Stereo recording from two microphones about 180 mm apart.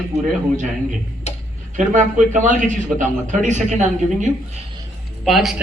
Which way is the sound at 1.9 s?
45° right (ahead or behind).